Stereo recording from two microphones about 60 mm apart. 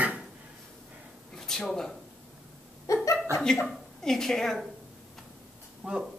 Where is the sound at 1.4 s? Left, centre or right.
Centre.